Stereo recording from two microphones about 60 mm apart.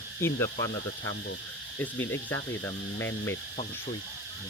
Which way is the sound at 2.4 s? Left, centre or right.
Left.